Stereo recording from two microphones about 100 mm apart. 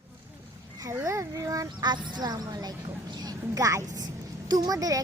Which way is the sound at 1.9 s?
45° right (ahead or behind).